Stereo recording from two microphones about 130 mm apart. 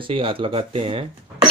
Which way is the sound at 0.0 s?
40° right (ahead or behind).